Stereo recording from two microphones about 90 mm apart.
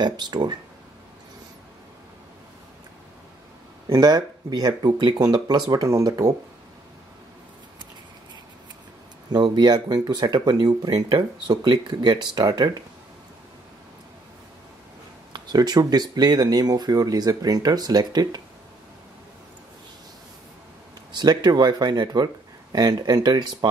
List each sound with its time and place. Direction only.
0.0 s speech: 55° right (ahead or behind)
3.9 s speech: 50° right (ahead or behind)
5.7 s speech: 40° right (ahead or behind)
9.3 s speech: 50° right (ahead or behind)
11.4 s speech: 55° right (ahead or behind)
15.3 s speech: 50° right (ahead or behind)
21.2 s speech: 50° right (ahead or behind)